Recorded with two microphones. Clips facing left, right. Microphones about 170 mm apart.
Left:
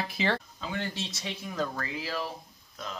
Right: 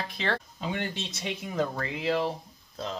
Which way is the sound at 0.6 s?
20° right (ahead or behind).